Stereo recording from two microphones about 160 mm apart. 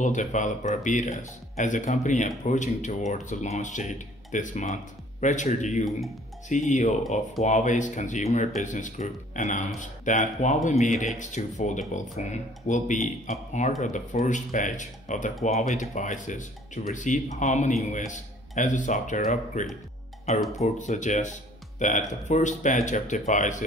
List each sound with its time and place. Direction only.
0.0 s speech: 50° left (ahead or behind)